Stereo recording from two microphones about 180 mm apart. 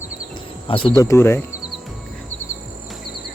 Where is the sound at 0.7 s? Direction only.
30° left (ahead or behind).